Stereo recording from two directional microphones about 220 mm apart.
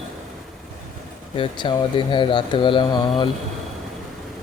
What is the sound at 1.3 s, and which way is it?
Speech, 25° left (ahead or behind).